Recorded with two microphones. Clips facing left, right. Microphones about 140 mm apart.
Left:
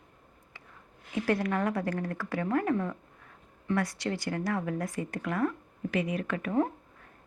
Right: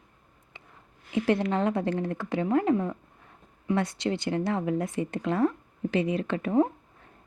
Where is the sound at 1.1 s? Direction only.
20° right (ahead or behind).